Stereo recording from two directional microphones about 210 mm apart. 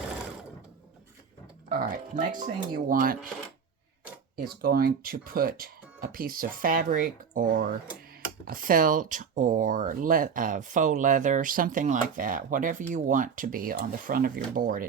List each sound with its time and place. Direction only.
1.7 s speech: 40° right (ahead or behind)
4.4 s speech: 45° right (ahead or behind)